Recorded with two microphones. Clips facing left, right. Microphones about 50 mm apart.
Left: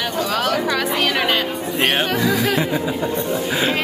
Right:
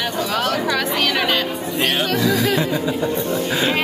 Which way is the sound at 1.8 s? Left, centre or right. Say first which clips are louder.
Left 1 dB; left.